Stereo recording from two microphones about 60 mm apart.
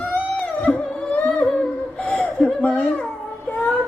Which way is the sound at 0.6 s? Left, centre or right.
Centre.